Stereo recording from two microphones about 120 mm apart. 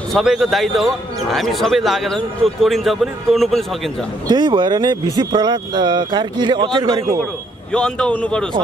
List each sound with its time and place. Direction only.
0.1 s speech: centre (ahead or behind)
4.3 s speech: 40° right (ahead or behind)
7.7 s a man's voice: 5° left (ahead or behind)